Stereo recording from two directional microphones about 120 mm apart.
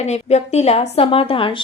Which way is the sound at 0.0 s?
70° left (ahead or behind).